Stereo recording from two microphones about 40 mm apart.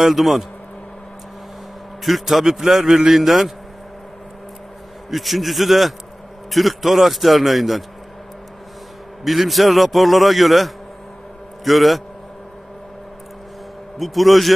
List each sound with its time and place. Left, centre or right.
0.0 s a man's voice: centre
2.0 s a man's voice: centre
5.1 s a man's voice: centre
9.2 s a man's voice: centre
13.9 s a man's voice: centre